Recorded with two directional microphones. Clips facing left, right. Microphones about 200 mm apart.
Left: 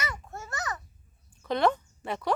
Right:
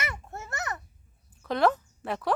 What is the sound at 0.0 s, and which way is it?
Babbling, 25° right (ahead or behind).